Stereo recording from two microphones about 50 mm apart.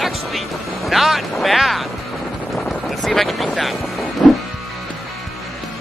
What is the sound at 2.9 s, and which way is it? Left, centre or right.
Vehicle, centre.